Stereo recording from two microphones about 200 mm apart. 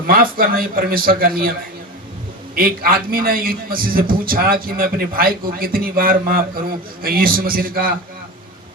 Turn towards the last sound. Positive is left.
turn(degrees=-45)  # may be behind; listen again after turning